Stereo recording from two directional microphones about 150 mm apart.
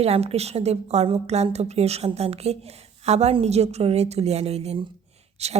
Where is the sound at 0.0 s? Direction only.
45° right (ahead or behind).